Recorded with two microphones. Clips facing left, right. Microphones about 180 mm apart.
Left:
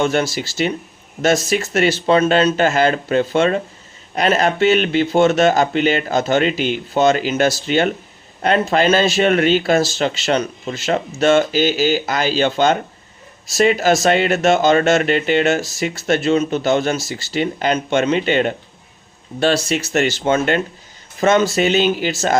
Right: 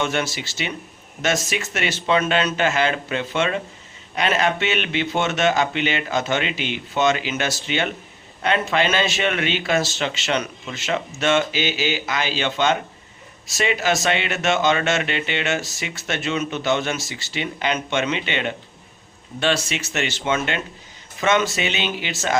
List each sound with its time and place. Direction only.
0.0 s speech: 35° left (ahead or behind)